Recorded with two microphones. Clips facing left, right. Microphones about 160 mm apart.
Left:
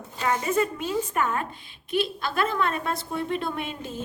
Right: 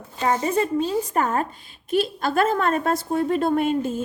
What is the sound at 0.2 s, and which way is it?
A woman's voice, 30° right (ahead or behind).